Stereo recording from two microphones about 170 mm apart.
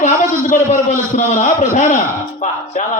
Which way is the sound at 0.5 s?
45° left (ahead or behind).